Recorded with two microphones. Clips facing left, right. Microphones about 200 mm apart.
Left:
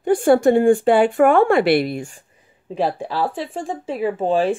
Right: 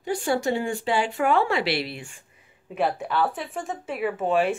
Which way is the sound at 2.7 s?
30° left (ahead or behind).